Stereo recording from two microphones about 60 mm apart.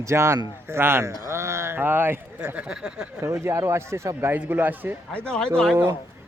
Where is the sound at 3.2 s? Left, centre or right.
Right.